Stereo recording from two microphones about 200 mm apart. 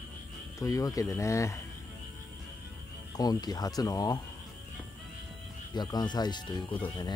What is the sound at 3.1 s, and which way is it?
Speech, 20° left (ahead or behind).